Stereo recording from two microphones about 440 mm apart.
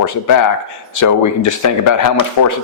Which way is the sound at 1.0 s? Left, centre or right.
Left.